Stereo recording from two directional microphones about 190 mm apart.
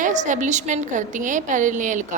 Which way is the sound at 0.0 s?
40° right (ahead or behind).